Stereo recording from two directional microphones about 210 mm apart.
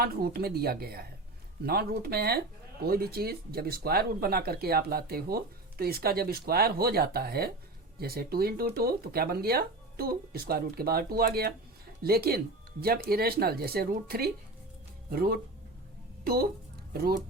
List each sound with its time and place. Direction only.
0.0 s speech: 45° right (ahead or behind)